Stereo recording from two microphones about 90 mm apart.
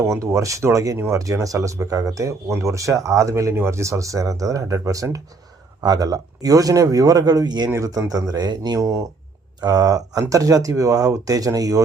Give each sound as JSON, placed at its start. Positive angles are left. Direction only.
{"t": 0.0, "sound": "speech", "side_deg": -30}
{"t": 7.7, "sound": "speech", "side_deg": -40}
{"t": 8.8, "sound": "speech", "side_deg": -35}